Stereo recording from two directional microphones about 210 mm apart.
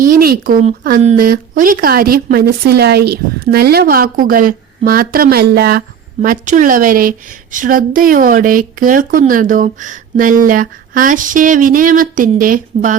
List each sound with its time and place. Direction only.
0.0 s a woman's voice: 45° right (ahead or behind)
6.2 s a woman's voice: 40° right (ahead or behind)